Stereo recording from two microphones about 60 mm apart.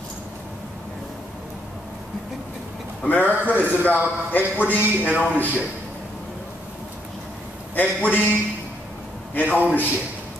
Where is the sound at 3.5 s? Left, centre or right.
Left.